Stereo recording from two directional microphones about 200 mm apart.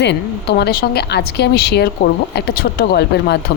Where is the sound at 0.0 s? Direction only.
60° left (ahead or behind).